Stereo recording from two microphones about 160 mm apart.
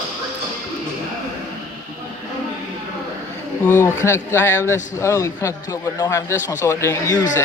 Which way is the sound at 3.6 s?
15° left (ahead or behind).